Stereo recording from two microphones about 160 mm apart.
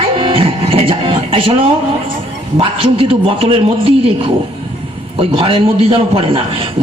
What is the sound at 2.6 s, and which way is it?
A man's voice, 35° right (ahead or behind).